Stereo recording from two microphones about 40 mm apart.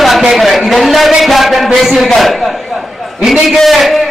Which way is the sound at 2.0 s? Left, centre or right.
Centre.